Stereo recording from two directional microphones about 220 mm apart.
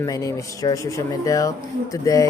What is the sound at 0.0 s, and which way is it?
Speech, 15° left (ahead or behind).